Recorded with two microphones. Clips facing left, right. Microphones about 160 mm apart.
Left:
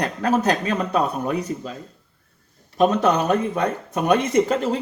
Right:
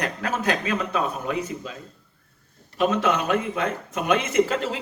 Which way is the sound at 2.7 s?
40° left (ahead or behind).